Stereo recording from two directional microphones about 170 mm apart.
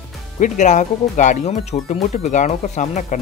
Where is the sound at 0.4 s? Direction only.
45° left (ahead or behind).